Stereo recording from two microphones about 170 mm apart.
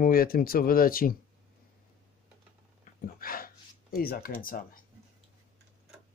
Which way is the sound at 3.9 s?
60° left (ahead or behind).